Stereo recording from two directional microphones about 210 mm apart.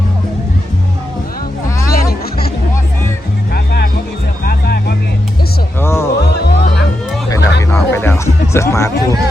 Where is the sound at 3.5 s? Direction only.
45° left (ahead or behind).